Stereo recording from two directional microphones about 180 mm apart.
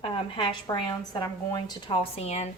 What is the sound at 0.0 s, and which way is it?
A woman's voice, 30° left (ahead or behind).